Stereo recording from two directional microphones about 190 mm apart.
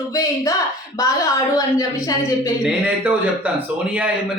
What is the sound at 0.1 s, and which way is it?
A woman's voice, 20° left (ahead or behind).